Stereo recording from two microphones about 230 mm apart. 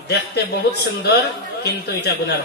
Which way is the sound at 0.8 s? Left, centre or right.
Left.